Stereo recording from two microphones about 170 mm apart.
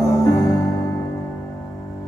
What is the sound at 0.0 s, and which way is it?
Music, 20° left (ahead or behind).